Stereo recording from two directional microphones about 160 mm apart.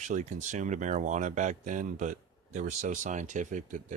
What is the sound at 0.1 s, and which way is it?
Speech, 50° right (ahead or behind).